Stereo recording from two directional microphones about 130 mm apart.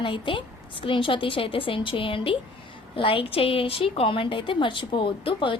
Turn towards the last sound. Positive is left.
turn(degrees=40)  # may be behind; listen again after turning